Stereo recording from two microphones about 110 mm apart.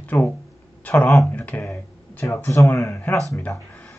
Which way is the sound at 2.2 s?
25° left (ahead or behind).